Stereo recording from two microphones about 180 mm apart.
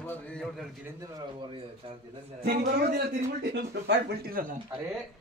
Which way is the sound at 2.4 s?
55° right (ahead or behind).